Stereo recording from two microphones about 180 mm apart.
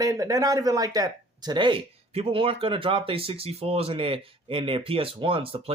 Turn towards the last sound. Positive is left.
turn(degrees=-30)  # may be behind; listen again after turning